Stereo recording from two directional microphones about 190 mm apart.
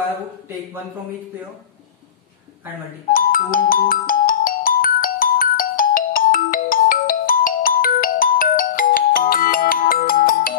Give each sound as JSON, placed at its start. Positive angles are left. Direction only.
{"t": 3.1, "sound": "music", "side_deg": 45}